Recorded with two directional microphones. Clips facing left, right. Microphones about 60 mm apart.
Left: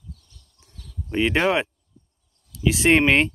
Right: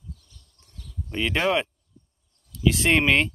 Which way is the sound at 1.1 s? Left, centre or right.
Centre.